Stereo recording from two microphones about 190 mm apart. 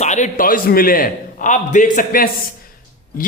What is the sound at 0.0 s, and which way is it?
Speech, 40° left (ahead or behind).